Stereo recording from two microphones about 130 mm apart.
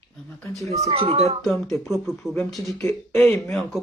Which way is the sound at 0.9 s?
50° right (ahead or behind).